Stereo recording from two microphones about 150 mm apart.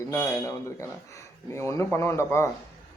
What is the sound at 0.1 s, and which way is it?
Speech, 15° left (ahead or behind).